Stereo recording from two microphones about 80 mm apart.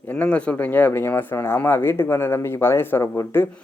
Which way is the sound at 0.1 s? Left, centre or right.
Centre.